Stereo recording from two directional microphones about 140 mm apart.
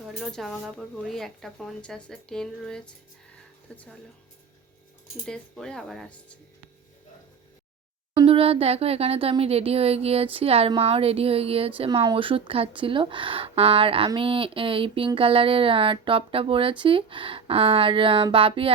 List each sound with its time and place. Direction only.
0.2 s speech: centre (ahead or behind)
5.2 s speech: 5° left (ahead or behind)
8.1 s speech: 40° right (ahead or behind)
11.9 s a sound: 35° right (ahead or behind)